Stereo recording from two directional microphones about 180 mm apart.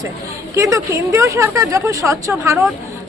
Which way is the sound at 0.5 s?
15° right (ahead or behind).